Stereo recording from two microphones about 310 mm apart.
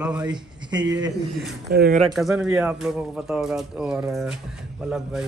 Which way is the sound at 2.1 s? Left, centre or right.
Centre.